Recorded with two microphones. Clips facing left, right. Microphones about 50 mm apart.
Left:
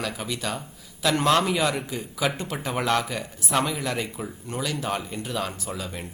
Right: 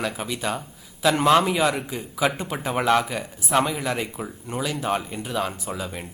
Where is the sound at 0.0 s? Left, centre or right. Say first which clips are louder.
Right 3 dB; centre.